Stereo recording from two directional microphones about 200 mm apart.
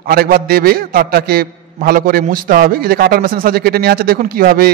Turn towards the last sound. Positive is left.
turn(degrees=-45)  # may be behind; listen again after turning